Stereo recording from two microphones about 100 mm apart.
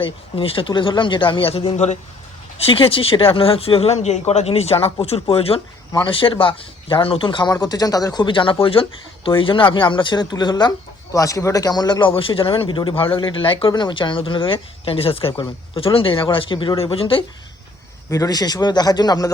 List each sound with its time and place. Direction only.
0.0 s speech: 65° left (ahead or behind)
6.1 s speech: 65° left (ahead or behind)
7.5 s speech: 40° left (ahead or behind); by 17.2 s 65° left (ahead or behind)
18.1 s speech: 35° left (ahead or behind)